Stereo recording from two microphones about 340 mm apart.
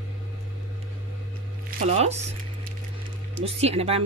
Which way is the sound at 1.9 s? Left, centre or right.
Right.